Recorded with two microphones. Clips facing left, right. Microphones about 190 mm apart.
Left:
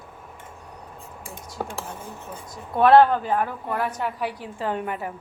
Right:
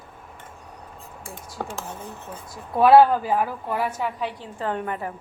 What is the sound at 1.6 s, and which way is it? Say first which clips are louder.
Speech: left 1 dB; 10° left (ahead or behind).